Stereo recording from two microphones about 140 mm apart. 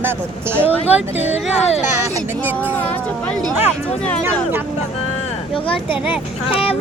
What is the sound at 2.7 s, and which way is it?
Speech, 10° left (ahead or behind).